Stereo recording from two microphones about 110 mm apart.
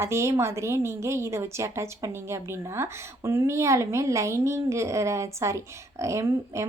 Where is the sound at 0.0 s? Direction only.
25° right (ahead or behind).